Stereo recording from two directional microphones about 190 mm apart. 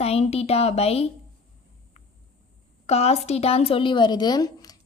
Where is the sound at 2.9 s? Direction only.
35° left (ahead or behind).